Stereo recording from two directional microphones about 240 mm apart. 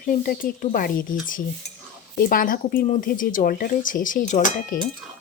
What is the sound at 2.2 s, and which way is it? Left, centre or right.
Speech, left.